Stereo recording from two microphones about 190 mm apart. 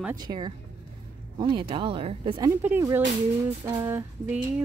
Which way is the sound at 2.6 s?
10° right (ahead or behind).